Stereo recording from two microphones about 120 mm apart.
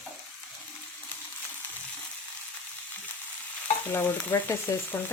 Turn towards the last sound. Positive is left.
turn(degrees=15)  # may be behind; listen again after turning